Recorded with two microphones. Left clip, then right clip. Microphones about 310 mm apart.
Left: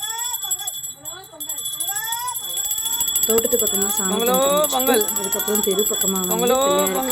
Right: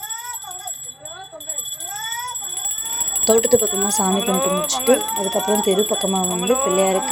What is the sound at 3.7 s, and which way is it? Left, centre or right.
Speech, centre.